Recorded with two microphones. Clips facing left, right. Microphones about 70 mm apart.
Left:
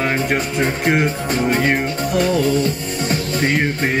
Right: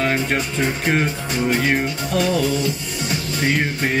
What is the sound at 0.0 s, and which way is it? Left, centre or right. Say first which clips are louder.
Music: left 1 dB; centre.